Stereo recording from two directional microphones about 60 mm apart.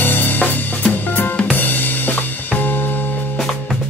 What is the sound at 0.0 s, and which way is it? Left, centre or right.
Drum kit, left.